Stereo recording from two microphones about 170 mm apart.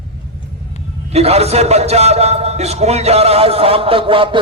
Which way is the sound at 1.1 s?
40° right (ahead or behind).